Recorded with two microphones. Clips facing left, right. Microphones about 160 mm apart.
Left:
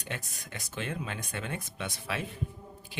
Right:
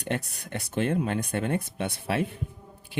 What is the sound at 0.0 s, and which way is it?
Speech, 65° right (ahead or behind).